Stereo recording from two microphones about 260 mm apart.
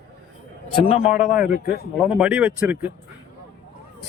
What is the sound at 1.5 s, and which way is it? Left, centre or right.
Speech, left.